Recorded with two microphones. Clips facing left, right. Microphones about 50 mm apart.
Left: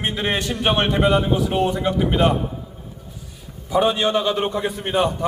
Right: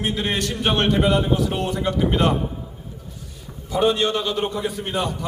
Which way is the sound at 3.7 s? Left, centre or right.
Centre.